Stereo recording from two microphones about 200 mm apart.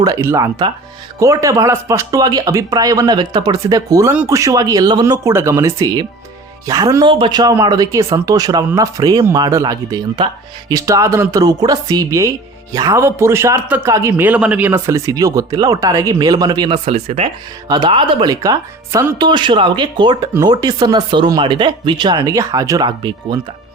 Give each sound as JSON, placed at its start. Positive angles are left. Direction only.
{"t": 0.0, "sound": "a man's voice", "side_deg": -15}